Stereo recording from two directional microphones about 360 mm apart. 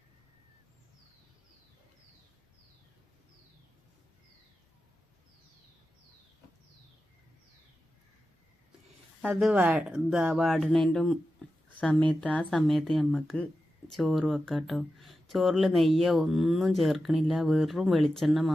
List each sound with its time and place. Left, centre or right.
9.2 s speech: centre